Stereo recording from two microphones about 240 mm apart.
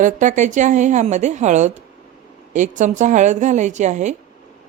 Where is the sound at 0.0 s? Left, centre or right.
Right.